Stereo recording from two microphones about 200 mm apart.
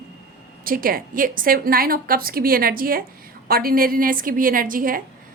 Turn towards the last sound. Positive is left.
turn(degrees=-45)  # may be behind; listen again after turning